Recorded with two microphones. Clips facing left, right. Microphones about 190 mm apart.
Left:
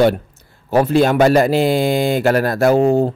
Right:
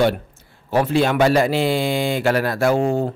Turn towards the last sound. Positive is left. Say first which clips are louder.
# left 5 dB
turn(degrees=40)  # may be behind; listen again after turning